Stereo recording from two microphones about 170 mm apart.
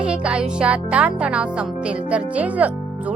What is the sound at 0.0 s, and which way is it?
A woman's voice, 5° right (ahead or behind).